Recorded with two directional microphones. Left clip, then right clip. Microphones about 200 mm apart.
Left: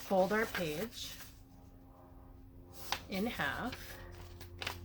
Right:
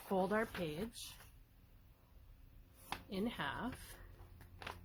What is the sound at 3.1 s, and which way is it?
Speech, 40° right (ahead or behind).